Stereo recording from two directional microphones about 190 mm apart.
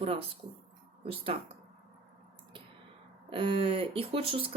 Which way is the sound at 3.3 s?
30° right (ahead or behind).